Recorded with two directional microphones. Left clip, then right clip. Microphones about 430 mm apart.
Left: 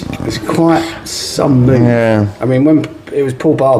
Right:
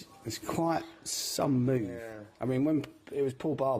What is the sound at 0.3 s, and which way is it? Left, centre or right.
Speech, right.